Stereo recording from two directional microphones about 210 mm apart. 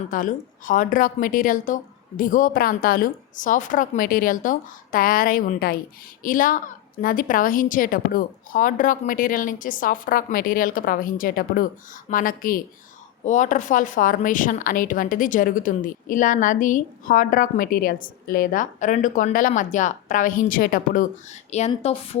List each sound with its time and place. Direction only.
0.1 s speech: 40° left (ahead or behind)
21.7 s a woman's voice: 30° left (ahead or behind)